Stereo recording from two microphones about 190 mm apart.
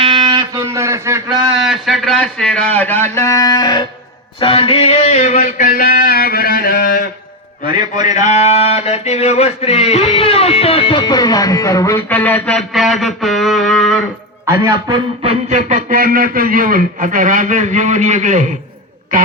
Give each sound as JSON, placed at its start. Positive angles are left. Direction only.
{"t": 0.0, "sound": "music", "side_deg": -25}
{"t": 1.5, "sound": "a man's voice", "side_deg": 0}
{"t": 3.2, "sound": "a sound", "side_deg": 15}
{"t": 7.9, "sound": "a man's voice", "side_deg": 40}
{"t": 8.3, "sound": "a sound", "side_deg": 35}
{"t": 14.4, "sound": "a man's voice", "side_deg": -15}